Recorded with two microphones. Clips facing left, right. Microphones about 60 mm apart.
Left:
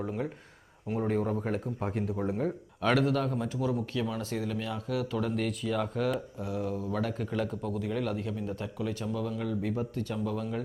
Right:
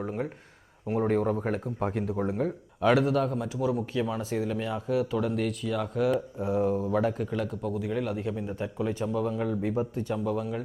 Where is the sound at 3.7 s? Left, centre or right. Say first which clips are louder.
Right 3 dB; centre.